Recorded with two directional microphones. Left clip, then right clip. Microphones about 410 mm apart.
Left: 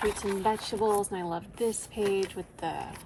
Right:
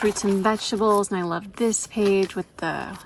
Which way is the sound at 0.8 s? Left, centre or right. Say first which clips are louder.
Right 8 dB; right.